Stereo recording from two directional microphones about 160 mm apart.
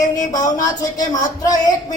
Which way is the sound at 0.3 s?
25° left (ahead or behind).